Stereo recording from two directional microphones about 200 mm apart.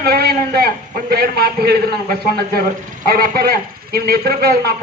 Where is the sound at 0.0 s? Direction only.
50° right (ahead or behind).